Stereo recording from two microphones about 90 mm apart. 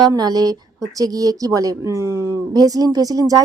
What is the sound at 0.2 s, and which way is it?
Speech, 45° right (ahead or behind).